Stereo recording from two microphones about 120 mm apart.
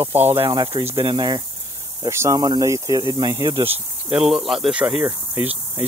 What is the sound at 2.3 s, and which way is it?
Speech, 35° right (ahead or behind).